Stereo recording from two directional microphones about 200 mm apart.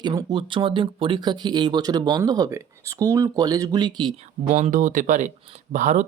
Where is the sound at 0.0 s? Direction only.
20° right (ahead or behind).